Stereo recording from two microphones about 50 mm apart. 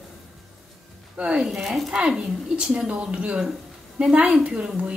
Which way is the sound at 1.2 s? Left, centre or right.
Right.